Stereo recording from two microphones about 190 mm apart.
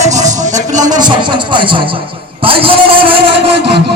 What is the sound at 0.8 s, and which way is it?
Speech, 20° right (ahead or behind).